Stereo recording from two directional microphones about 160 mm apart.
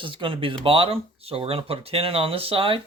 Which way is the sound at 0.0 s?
30° right (ahead or behind).